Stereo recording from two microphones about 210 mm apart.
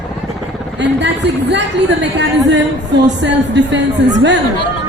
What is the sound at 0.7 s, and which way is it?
A woman's voice, 55° right (ahead or behind).